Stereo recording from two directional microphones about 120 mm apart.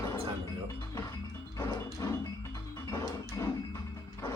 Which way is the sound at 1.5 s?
30° left (ahead or behind).